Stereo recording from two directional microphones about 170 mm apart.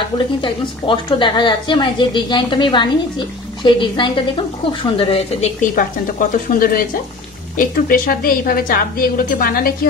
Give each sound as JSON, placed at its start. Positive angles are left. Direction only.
{"t": 0.4, "sound": "a woman's voice", "side_deg": 30}
{"t": 5.6, "sound": "a woman's voice", "side_deg": 50}